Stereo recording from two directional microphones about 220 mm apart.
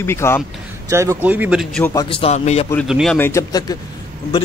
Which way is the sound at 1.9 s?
25° left (ahead or behind).